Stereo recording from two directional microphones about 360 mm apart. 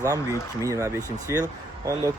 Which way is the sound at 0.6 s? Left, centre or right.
Centre.